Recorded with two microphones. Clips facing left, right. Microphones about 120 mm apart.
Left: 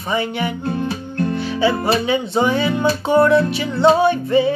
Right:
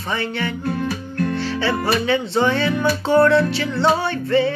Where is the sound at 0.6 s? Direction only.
25° left (ahead or behind).